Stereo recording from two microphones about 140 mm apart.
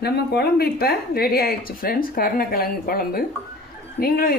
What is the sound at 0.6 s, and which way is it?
A woman's voice, 90° left.